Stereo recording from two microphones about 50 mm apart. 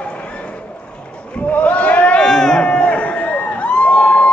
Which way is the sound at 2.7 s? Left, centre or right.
Left.